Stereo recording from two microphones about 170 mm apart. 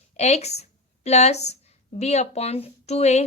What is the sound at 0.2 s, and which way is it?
A woman's voice, 40° left (ahead or behind).